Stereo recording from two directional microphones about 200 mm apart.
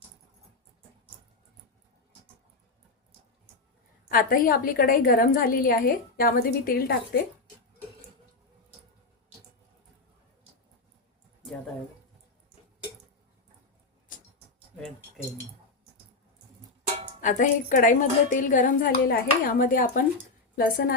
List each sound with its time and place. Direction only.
4.1 s a woman's voice: 45° left (ahead or behind)
17.2 s a woman's voice: 40° left (ahead or behind)